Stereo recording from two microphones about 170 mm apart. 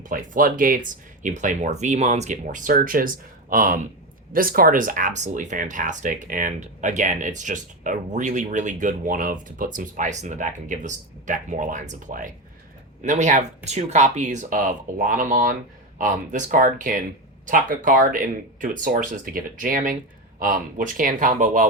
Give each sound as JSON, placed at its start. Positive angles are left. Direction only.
{"t": 0.0, "sound": "speech", "side_deg": -50}